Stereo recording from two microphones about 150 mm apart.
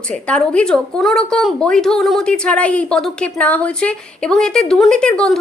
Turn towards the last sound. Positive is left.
turn(degrees=5)  # may be behind; listen again after turning